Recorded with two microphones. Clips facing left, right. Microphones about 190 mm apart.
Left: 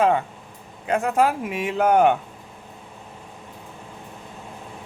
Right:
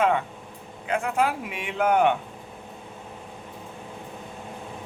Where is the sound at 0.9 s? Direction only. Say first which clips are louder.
Left 4 dB; 40° left (ahead or behind).